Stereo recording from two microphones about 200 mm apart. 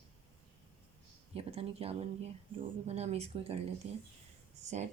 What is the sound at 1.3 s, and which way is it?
Speech, 30° right (ahead or behind).